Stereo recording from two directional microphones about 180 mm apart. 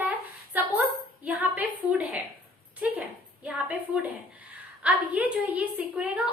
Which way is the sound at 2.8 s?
10° right (ahead or behind).